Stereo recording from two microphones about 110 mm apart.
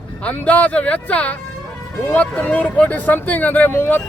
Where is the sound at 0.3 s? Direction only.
15° left (ahead or behind).